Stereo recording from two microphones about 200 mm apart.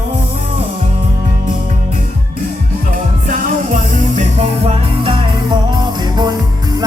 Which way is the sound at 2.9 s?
45° right (ahead or behind).